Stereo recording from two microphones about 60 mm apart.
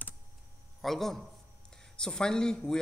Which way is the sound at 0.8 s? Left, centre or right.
Centre.